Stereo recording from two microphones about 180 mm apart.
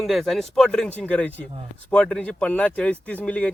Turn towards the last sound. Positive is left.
turn(degrees=5)  # may be behind; listen again after turning